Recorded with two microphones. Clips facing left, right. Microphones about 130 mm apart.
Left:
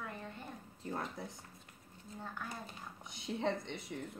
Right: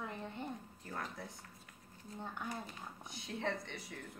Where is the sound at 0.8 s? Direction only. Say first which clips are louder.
Left 6 dB; 25° left (ahead or behind).